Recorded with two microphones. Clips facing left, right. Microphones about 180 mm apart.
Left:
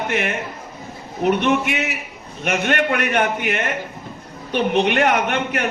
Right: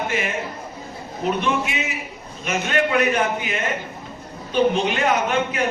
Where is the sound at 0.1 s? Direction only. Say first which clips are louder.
Left 2 dB; 65° left (ahead or behind).